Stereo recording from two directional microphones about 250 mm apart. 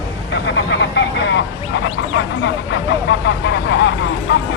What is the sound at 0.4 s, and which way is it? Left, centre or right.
Speech, left.